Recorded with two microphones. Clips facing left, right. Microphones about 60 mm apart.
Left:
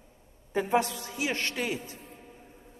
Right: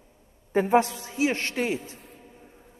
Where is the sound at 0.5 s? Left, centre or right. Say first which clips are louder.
Right 5 dB; right.